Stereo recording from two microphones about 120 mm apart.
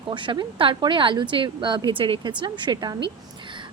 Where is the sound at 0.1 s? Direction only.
40° right (ahead or behind).